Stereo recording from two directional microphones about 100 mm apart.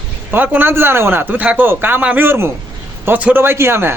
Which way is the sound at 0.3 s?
20° right (ahead or behind).